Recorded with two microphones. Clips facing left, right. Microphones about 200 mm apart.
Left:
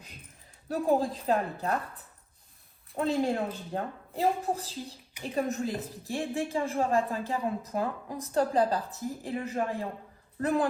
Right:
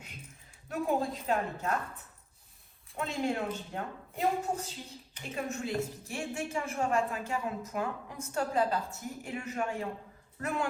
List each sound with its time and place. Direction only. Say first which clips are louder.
0.7 s a woman's voice: left 4 dB; 35° left (ahead or behind)
2.9 s a woman's voice: left 5 dB; 35° left (ahead or behind)